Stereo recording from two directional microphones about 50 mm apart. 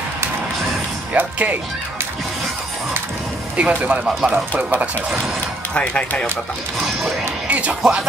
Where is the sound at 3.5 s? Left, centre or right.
Right.